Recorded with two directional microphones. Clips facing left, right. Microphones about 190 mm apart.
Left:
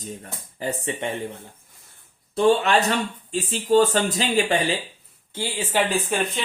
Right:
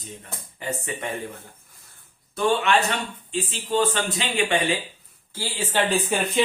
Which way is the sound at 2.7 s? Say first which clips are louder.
Left 2 dB; 35° left (ahead or behind).